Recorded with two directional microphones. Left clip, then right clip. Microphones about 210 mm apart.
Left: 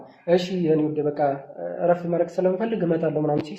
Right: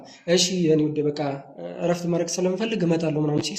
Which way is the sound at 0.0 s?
50° right (ahead or behind).